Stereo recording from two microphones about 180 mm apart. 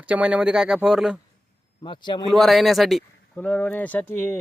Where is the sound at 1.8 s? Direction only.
25° left (ahead or behind).